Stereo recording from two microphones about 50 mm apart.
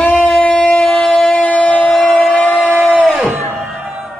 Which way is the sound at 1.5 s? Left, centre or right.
Left.